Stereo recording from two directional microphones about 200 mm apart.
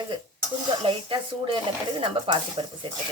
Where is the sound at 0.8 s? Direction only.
25° right (ahead or behind).